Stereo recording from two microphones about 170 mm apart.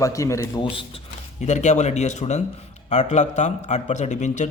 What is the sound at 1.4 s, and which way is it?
A man's voice, 45° left (ahead or behind).